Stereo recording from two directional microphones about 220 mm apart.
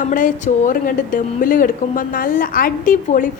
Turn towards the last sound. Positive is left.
turn(degrees=35)  # may be behind; listen again after turning